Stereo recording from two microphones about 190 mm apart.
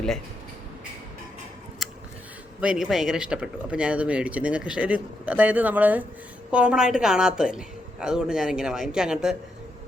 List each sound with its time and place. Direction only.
2.6 s a woman's voice: 5° right (ahead or behind)